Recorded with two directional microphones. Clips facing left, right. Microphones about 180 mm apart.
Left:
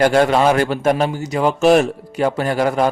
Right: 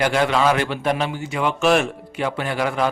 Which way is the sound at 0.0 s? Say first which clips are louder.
Left 5 dB; 45° left (ahead or behind).